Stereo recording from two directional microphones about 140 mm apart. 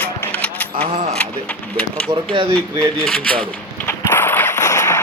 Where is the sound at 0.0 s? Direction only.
10° left (ahead or behind).